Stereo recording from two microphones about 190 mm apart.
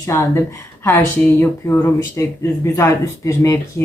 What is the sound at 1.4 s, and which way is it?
Speech, 10° left (ahead or behind).